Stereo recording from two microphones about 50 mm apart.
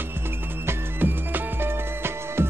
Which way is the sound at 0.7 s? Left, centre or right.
Right.